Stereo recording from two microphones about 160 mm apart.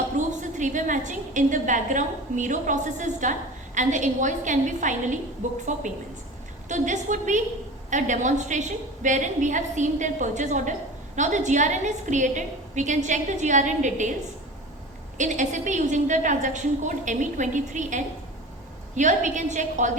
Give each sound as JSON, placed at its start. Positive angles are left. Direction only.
{"t": 0.2, "sound": "a woman's voice", "side_deg": -50}
{"t": 15.2, "sound": "a woman's voice", "side_deg": -50}